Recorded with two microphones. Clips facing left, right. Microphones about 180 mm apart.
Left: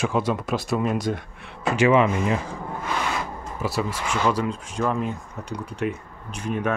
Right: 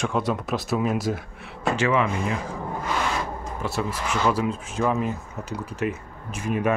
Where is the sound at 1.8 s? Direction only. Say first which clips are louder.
Left 5 dB; 20° left (ahead or behind).